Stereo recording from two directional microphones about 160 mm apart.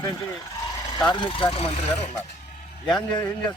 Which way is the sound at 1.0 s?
30° left (ahead or behind).